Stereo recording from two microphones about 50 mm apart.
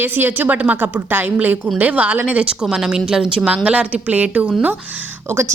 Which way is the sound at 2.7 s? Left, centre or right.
Centre.